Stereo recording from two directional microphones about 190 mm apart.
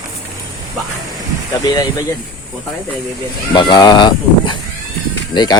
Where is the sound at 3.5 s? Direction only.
25° left (ahead or behind).